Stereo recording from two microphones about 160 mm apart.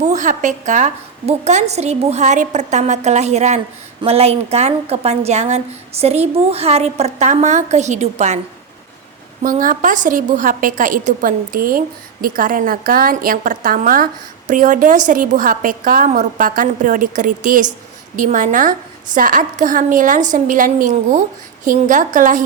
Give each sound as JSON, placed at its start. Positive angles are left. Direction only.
{"t": 0.0, "sound": "a woman's voice", "side_deg": -50}
{"t": 9.4, "sound": "a woman's voice", "side_deg": -55}